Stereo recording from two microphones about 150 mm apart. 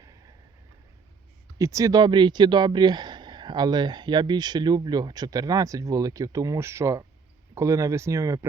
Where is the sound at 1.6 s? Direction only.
20° right (ahead or behind).